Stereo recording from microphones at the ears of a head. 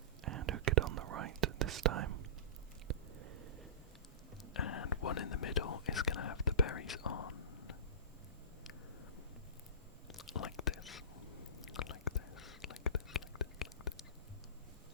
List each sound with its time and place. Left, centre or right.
0.3 s whispering: right
2.8 s a sound: right
4.5 s whispering: left
10.1 s whispering: left